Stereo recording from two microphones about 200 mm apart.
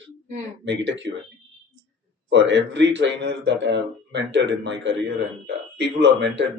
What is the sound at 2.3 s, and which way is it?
Speech, 65° right (ahead or behind).